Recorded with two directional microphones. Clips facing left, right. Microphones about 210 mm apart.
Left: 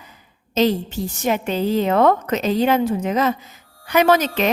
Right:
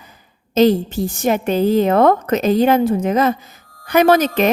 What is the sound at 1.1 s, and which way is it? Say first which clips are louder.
A woman's voice: right 4 dB; 50° right (ahead or behind).